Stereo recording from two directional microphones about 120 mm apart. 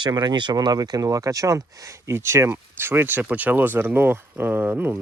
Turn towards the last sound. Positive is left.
turn(degrees=-15)  # may be behind; listen again after turning